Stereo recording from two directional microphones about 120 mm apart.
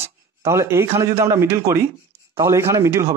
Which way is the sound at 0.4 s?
25° right (ahead or behind).